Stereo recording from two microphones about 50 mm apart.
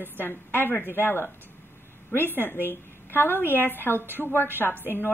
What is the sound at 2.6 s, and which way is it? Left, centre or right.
A woman's voice, left.